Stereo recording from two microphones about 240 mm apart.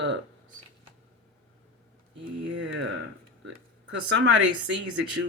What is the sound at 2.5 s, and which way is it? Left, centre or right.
Speech, right.